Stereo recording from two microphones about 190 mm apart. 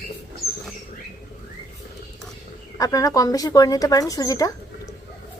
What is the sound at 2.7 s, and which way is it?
Speech, 20° left (ahead or behind).